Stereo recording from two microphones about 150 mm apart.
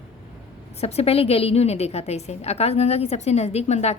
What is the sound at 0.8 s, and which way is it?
A woman's voice, 45° left (ahead or behind).